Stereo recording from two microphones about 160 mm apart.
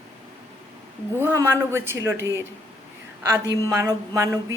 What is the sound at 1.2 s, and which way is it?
A woman's voice, 15° right (ahead or behind).